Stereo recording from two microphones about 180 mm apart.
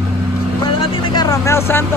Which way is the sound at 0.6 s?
25° left (ahead or behind).